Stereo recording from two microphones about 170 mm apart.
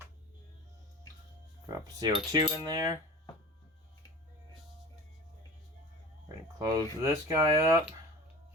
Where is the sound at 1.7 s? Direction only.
20° right (ahead or behind).